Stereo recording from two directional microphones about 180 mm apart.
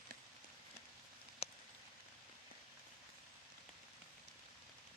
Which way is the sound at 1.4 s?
35° left (ahead or behind).